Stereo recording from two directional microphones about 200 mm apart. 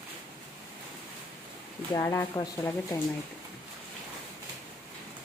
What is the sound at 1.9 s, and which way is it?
Speech, 15° left (ahead or behind).